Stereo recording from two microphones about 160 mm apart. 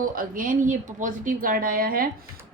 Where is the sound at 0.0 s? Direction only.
60° right (ahead or behind).